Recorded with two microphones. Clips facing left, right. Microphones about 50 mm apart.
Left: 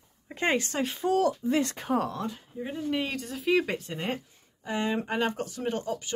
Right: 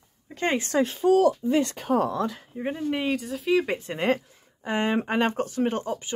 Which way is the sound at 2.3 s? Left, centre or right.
Right.